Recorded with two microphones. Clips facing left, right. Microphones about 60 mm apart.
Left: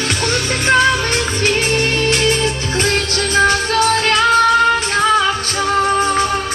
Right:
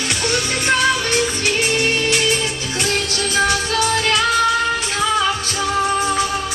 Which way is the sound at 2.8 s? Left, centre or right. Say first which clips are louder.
Left 3 dB; left.